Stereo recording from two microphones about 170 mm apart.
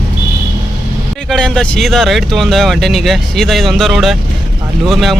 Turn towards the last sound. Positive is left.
turn(degrees=0)  # may be behind; listen again after turning